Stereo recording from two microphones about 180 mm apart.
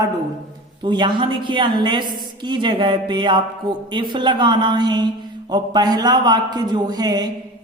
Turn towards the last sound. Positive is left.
turn(degrees=-20)  # may be behind; listen again after turning